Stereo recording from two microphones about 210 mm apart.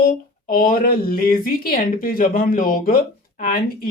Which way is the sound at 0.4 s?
40° left (ahead or behind).